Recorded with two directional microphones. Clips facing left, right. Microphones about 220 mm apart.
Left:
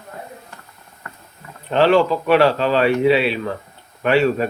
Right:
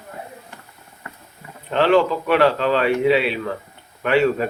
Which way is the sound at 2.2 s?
30° left (ahead or behind).